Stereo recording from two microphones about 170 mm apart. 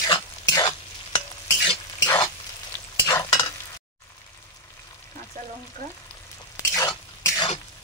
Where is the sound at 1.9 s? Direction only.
20° left (ahead or behind).